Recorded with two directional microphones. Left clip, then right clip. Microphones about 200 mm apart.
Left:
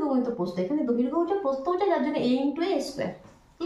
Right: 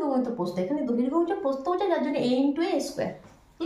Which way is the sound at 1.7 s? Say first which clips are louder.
Left 1 dB; 30° right (ahead or behind).